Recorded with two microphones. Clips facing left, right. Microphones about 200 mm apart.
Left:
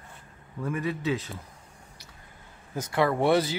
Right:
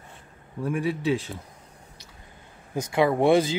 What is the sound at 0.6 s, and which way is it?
Speech, 15° right (ahead or behind).